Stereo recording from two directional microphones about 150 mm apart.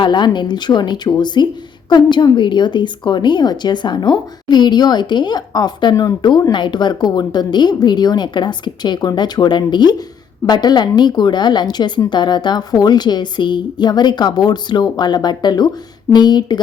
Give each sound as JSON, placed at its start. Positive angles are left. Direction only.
{"t": 0.0, "sound": "a woman's voice", "side_deg": 30}